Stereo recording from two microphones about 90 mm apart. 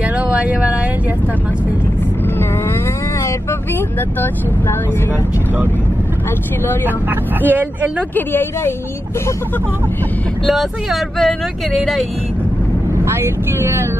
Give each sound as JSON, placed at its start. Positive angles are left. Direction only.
{"t": 0.0, "sound": "a sound", "side_deg": -15}
{"t": 7.1, "sound": "speech", "side_deg": -20}
{"t": 8.1, "sound": "speech", "side_deg": 25}
{"t": 10.4, "sound": "speech", "side_deg": 0}
{"t": 13.0, "sound": "speech", "side_deg": -25}